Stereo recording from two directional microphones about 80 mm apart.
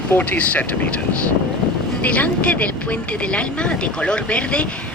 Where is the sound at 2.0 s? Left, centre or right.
Centre.